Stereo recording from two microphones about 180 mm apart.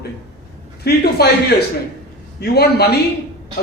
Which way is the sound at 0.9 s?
65° left (ahead or behind).